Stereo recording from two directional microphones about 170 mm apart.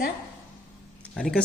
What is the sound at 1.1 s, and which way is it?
Speech, 5° left (ahead or behind).